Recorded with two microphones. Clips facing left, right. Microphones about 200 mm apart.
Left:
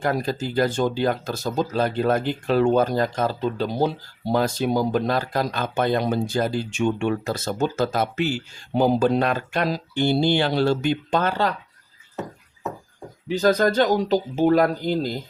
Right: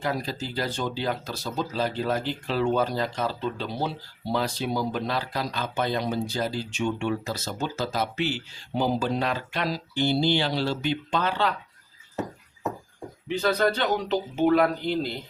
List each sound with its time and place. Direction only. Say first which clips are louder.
0.0 s speech: left 5 dB; 50° left (ahead or behind)
13.3 s speech: left 5 dB; 40° left (ahead or behind)